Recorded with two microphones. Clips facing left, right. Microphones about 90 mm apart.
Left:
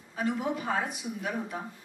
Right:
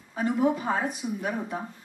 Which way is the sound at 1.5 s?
35° right (ahead or behind).